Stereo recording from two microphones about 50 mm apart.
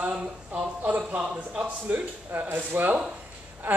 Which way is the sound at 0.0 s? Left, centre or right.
Right.